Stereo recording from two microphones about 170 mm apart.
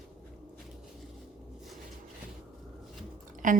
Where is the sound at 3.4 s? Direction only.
50° right (ahead or behind).